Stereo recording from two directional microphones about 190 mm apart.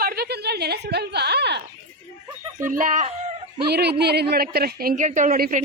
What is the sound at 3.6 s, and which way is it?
A woman's voice, 60° right (ahead or behind).